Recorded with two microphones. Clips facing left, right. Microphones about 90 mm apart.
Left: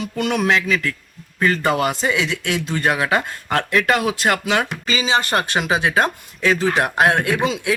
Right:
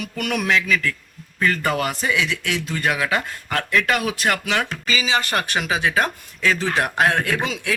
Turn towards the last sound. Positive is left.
turn(degrees=20)  # may be behind; listen again after turning